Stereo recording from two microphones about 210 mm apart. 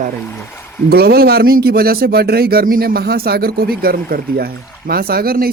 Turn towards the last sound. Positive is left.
turn(degrees=-45)  # may be behind; listen again after turning